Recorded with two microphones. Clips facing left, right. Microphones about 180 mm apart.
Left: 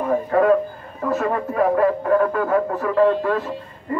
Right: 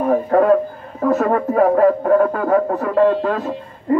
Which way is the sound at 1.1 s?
45° right (ahead or behind).